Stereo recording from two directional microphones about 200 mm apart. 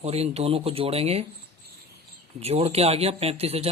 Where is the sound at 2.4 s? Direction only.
30° right (ahead or behind).